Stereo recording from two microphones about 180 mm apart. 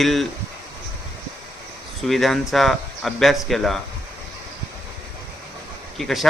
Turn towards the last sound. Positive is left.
turn(degrees=0)  # may be behind; listen again after turning